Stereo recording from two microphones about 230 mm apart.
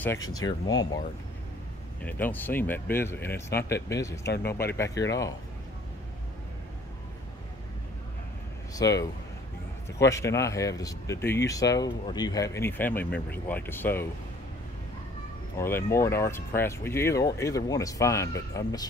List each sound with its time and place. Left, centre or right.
0.0 s speech: centre
8.7 s speech: centre
15.5 s speech: centre